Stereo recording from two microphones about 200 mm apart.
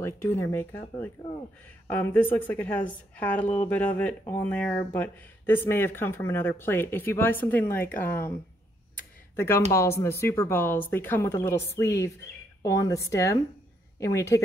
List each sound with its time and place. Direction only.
0.0 s speech: 15° left (ahead or behind)
9.3 s speech: 10° left (ahead or behind)